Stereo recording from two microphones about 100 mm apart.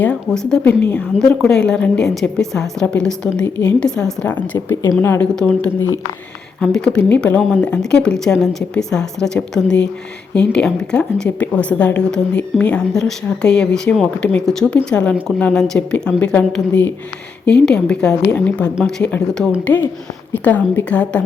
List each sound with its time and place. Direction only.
0.0 s a woman's voice: 10° left (ahead or behind)
4.5 s a woman's voice: 25° left (ahead or behind)
5.2 s a woman's voice: 5° left (ahead or behind)
6.6 s a woman's voice: 5° left (ahead or behind)
19.6 s a woman's voice: 20° left (ahead or behind)